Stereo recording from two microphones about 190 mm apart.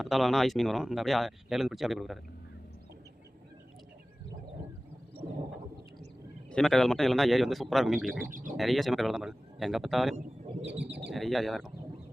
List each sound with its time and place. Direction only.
0.0 s speech: centre (ahead or behind)
6.5 s speech: centre (ahead or behind)
8.3 s speech: 45° right (ahead or behind)
8.5 s speech: centre (ahead or behind)
10.7 s speech: 65° right (ahead or behind)
11.1 s speech: centre (ahead or behind)